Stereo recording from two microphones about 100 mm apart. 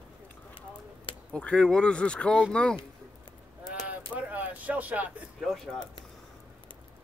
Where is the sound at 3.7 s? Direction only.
15° right (ahead or behind).